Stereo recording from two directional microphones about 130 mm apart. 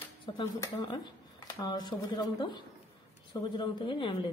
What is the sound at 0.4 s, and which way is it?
Speech, 30° left (ahead or behind).